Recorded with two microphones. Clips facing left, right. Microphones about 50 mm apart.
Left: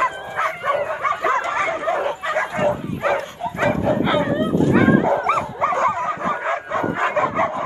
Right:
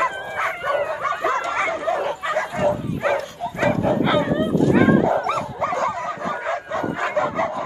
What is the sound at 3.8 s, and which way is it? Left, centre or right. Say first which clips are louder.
Dog: even; centre.